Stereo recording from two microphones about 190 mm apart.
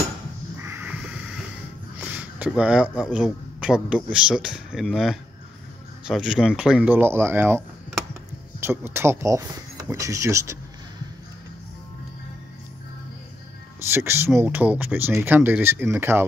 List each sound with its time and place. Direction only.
0.6 s crow: 10° right (ahead or behind)
2.0 s a sound: 10° right (ahead or behind)
3.0 s a man's voice: 5° right (ahead or behind)
8.1 s a sound: 10° right (ahead or behind)
9.8 s speech: 15° right (ahead or behind)
13.9 s speech: 15° right (ahead or behind)